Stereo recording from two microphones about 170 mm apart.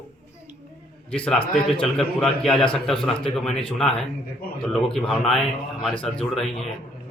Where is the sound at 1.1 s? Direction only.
5° left (ahead or behind).